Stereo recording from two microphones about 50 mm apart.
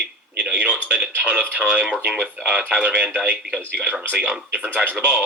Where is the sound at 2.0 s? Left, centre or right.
Right.